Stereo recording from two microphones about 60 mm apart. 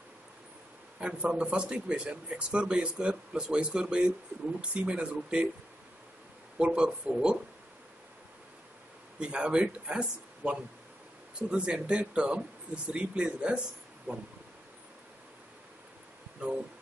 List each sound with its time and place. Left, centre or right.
0.9 s speech: centre
6.6 s speech: centre
9.2 s speech: centre
14.1 s a sound: right